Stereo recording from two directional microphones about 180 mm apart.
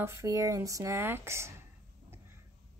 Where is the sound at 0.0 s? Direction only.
15° right (ahead or behind).